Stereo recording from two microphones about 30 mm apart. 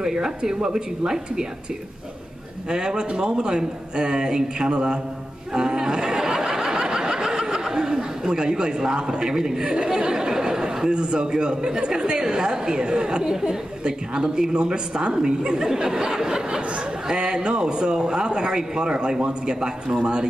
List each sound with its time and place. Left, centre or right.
0.0 s speech: right
2.7 s speech: right
5.5 s snicker: right
9.6 s speech: right
10.1 s chatter: centre
10.9 s speech: right